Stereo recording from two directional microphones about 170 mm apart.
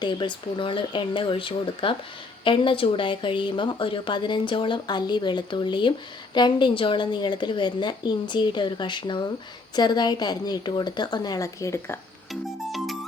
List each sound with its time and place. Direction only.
0.0 s speech: 30° left (ahead or behind)
12.3 s music: centre (ahead or behind)